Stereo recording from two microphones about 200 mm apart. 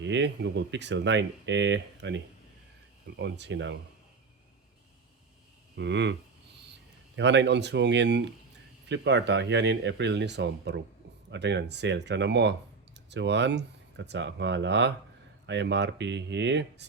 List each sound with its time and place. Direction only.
0.0 s speech: 60° right (ahead or behind)
5.7 s speech: 60° right (ahead or behind)
7.2 s speech: 60° right (ahead or behind)